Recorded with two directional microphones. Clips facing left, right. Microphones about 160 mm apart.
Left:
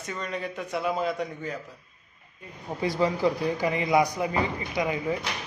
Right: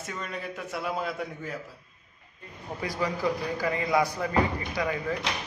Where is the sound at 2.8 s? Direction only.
25° left (ahead or behind).